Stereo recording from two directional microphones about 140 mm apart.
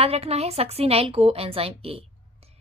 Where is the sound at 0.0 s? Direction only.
45° right (ahead or behind).